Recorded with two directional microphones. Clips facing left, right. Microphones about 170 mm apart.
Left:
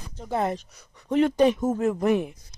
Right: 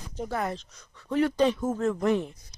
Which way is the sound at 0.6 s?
10° left (ahead or behind).